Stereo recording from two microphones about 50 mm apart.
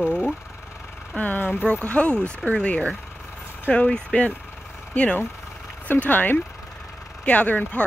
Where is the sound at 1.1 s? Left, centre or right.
Left.